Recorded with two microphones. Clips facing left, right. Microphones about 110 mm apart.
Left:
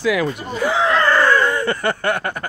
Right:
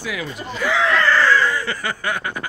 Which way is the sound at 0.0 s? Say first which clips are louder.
Left 9 dB; 70° left (ahead or behind).